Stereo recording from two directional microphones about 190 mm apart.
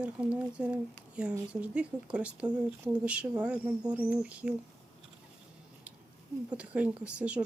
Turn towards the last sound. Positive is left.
turn(degrees=-5)  # may be behind; listen again after turning